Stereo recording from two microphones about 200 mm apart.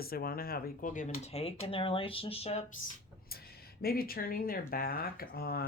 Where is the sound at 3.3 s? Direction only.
50° left (ahead or behind).